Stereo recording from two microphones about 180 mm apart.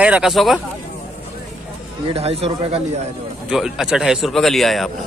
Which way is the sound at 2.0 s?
35° right (ahead or behind).